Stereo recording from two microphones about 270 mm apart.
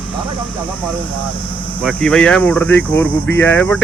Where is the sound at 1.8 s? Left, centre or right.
Centre.